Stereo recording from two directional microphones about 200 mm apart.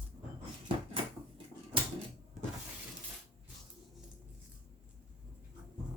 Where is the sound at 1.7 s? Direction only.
25° right (ahead or behind).